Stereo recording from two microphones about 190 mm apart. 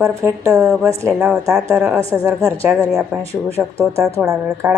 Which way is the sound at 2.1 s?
15° right (ahead or behind).